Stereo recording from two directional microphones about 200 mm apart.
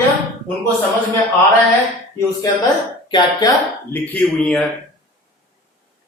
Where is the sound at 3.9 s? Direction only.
10° left (ahead or behind).